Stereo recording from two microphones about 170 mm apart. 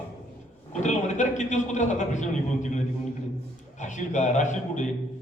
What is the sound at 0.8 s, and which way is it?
A man's voice, 45° left (ahead or behind).